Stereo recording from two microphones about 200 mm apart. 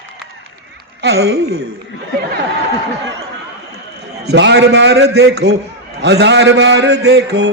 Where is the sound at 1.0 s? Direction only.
55° right (ahead or behind).